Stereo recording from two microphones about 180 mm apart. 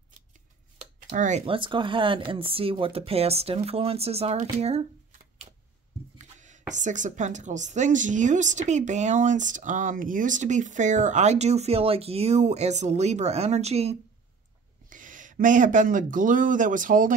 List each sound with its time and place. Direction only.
1.1 s speech: 45° right (ahead or behind)
1.4 s a woman's voice: 30° right (ahead or behind)
5.4 s a sound: 30° right (ahead or behind)
6.1 s chopping: 40° right (ahead or behind)
6.7 s a woman's voice: 45° right (ahead or behind)
14.9 s speech: 45° right (ahead or behind)